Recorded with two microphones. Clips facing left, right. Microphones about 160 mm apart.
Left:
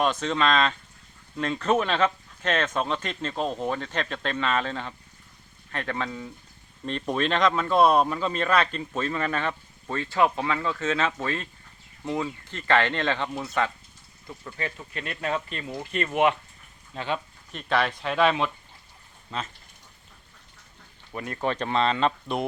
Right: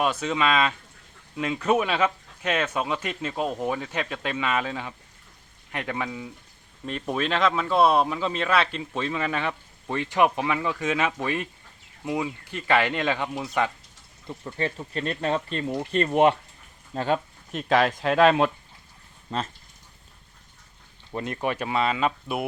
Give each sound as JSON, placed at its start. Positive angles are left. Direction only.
{"t": 0.0, "sound": "speech", "side_deg": -10}
{"t": 14.3, "sound": "speech", "side_deg": -25}
{"t": 18.2, "sound": "speech", "side_deg": -45}
{"t": 21.1, "sound": "speech", "side_deg": -25}
{"t": 21.4, "sound": "speech", "side_deg": -10}